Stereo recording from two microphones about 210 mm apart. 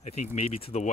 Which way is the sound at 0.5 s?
30° left (ahead or behind).